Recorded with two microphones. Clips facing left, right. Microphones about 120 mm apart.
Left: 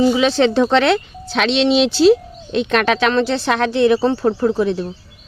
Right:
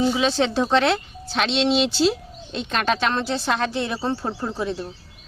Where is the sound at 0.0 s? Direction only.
90° left; by 4.9 s 70° left (ahead or behind).